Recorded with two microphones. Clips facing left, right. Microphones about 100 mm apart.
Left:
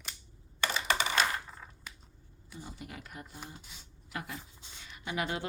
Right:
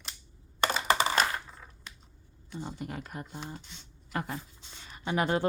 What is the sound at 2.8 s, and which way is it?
Speech, 45° right (ahead or behind).